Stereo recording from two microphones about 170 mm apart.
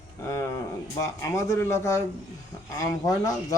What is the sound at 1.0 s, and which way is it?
Speech, 20° left (ahead or behind).